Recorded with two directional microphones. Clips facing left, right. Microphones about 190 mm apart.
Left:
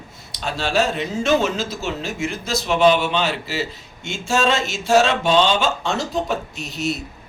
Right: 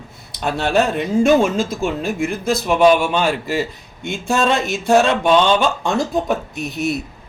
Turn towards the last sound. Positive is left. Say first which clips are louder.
# right 4 dB
turn(degrees=-55)  # may be behind; listen again after turning